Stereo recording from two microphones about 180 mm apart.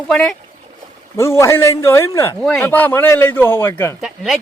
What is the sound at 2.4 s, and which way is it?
A man's voice, 5° left (ahead or behind).